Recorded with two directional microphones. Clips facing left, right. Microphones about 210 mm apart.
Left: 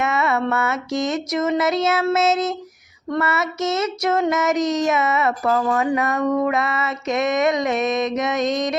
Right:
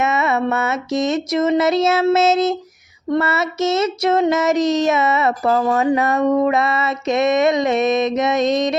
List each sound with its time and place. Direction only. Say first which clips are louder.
0.0 s child singing: right 2 dB; 20° right (ahead or behind)